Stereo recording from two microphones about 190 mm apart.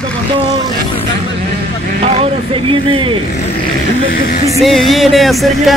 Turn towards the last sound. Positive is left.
turn(degrees=0)  # may be behind; listen again after turning